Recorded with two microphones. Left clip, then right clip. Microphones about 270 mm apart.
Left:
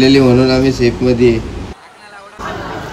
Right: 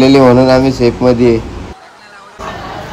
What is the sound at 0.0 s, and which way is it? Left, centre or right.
Speech, centre.